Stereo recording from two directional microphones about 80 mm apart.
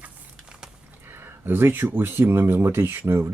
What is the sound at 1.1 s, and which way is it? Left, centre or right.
Speech, right.